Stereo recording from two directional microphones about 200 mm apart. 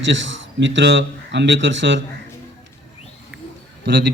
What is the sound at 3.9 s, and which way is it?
Speech, 60° right (ahead or behind).